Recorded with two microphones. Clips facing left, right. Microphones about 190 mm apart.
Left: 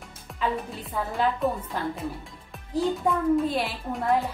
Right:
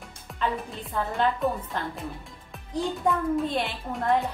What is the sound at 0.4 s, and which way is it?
Speech, 5° left (ahead or behind).